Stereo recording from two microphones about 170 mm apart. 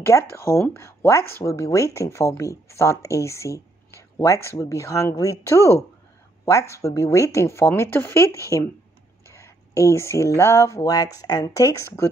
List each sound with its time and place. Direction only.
0.0 s speech: 15° left (ahead or behind)